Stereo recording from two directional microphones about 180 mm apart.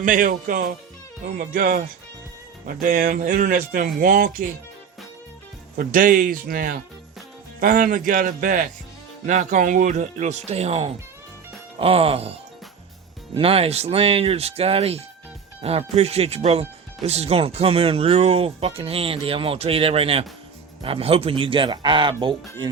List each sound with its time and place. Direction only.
0.0 s speech: 50° right (ahead or behind)
5.7 s speech: 50° right (ahead or behind); by 22.7 s 25° right (ahead or behind)